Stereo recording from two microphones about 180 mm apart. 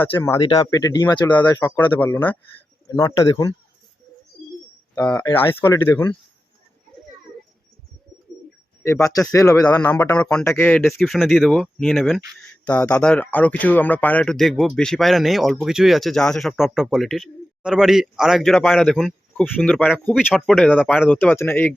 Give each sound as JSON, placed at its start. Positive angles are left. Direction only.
{"t": 0.0, "sound": "speech", "side_deg": 10}
{"t": 0.3, "sound": "speech", "side_deg": 30}
{"t": 0.7, "sound": "speech", "side_deg": 20}
{"t": 1.6, "sound": "speech", "side_deg": 10}
{"t": 4.9, "sound": "speech", "side_deg": 5}
{"t": 8.8, "sound": "speech", "side_deg": 15}
{"t": 21.1, "sound": "speech", "side_deg": 10}